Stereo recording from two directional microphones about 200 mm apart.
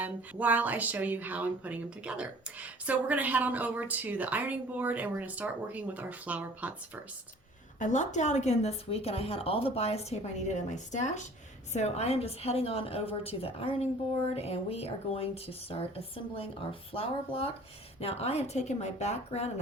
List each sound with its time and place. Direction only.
0.0 s speech: 10° right (ahead or behind)
7.8 s a woman's voice: 40° left (ahead or behind)